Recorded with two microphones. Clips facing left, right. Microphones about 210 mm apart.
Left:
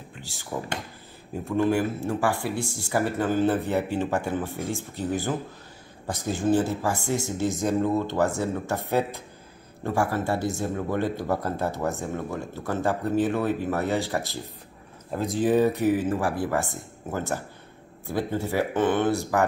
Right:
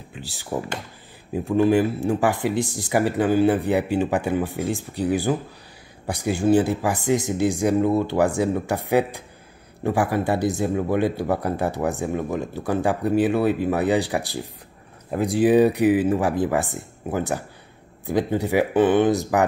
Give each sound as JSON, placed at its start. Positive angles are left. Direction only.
{"t": 0.3, "sound": "speech", "side_deg": -15}